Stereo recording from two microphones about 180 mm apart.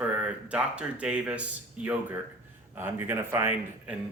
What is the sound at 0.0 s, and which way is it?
Speech, 5° right (ahead or behind).